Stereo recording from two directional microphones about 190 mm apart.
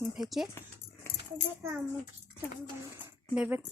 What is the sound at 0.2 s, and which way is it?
Speech, centre (ahead or behind).